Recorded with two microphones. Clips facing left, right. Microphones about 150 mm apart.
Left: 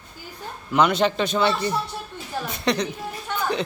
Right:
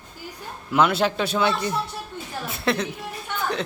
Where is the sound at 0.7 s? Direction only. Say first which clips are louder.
Left 1 dB; 5° right (ahead or behind).